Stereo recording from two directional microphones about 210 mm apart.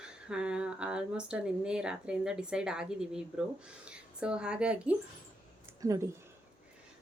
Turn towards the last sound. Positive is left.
turn(degrees=-15)  # may be behind; listen again after turning